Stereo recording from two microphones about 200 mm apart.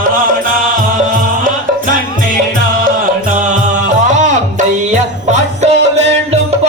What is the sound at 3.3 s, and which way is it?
Music, 40° right (ahead or behind).